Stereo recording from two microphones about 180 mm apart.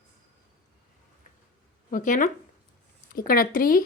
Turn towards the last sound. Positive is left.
turn(degrees=50)  # may be behind; listen again after turning